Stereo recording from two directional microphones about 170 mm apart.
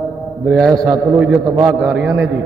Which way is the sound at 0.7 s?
20° right (ahead or behind).